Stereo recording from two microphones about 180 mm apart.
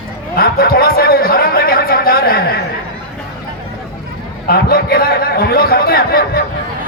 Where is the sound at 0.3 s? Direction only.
55° left (ahead or behind).